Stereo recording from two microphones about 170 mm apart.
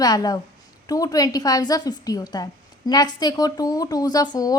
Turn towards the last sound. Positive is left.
turn(degrees=25)  # may be behind; listen again after turning